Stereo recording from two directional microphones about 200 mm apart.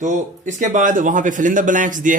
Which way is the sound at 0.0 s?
40° right (ahead or behind).